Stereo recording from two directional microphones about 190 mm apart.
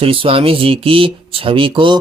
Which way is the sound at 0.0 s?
30° right (ahead or behind).